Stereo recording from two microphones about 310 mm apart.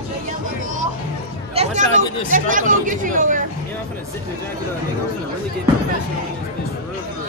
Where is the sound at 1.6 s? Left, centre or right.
Centre.